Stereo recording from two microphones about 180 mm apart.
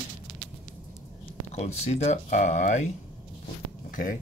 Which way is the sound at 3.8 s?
50° left (ahead or behind).